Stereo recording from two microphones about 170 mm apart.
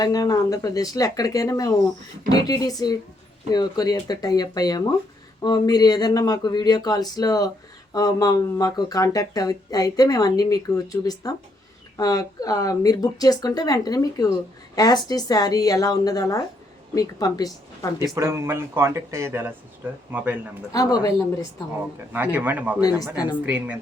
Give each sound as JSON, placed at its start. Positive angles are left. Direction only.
{"t": 0.0, "sound": "speech", "side_deg": 20}
{"t": 18.1, "sound": "speech", "side_deg": -15}
{"t": 20.7, "sound": "speech", "side_deg": 20}
{"t": 22.1, "sound": "speech", "side_deg": -10}
{"t": 22.8, "sound": "speech", "side_deg": 20}
{"t": 23.5, "sound": "speech", "side_deg": -10}